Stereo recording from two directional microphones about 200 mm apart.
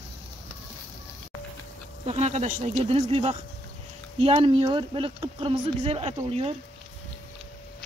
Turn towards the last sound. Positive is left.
turn(degrees=-30)  # may be behind; listen again after turning